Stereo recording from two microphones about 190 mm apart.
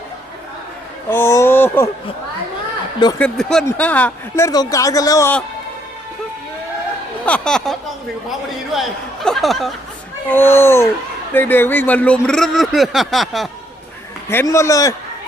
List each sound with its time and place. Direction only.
1.1 s speech: 15° left (ahead or behind)
3.2 s speech: 5° left (ahead or behind)
7.3 s speech: 5° left (ahead or behind)
10.2 s speech: 10° left (ahead or behind)
14.3 s speech: 15° left (ahead or behind)